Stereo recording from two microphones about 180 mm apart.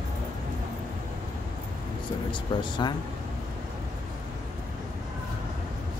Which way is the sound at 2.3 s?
25° left (ahead or behind).